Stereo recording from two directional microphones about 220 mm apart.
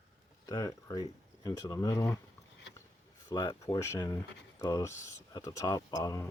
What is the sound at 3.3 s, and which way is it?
Speech, 15° left (ahead or behind).